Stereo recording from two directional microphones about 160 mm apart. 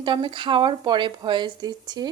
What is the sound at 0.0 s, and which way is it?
A woman's voice, 30° right (ahead or behind).